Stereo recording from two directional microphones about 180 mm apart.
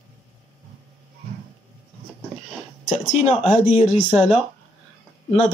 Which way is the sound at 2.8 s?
40° left (ahead or behind).